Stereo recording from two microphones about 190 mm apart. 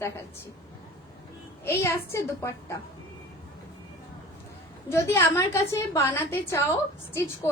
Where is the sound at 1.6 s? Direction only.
15° left (ahead or behind).